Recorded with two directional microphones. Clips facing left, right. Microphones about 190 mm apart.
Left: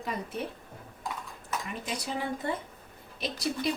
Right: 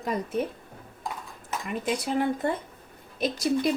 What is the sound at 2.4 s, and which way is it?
Speech, 50° right (ahead or behind).